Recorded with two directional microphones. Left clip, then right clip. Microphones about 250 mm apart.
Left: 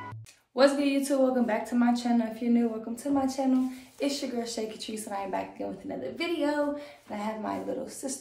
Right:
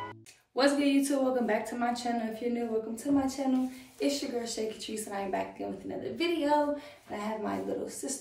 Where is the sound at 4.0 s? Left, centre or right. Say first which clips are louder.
Even; centre.